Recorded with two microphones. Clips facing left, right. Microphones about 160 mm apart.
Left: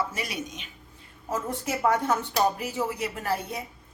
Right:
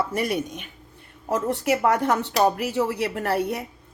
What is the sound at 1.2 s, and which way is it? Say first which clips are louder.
Speech: right 7 dB; 70° right (ahead or behind).